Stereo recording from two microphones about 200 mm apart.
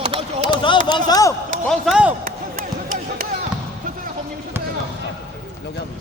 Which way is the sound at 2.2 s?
45° right (ahead or behind).